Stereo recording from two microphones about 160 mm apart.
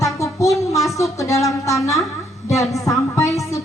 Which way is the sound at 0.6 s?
20° left (ahead or behind).